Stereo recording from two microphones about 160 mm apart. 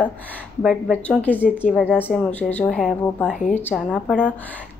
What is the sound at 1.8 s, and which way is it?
Speech, 10° left (ahead or behind).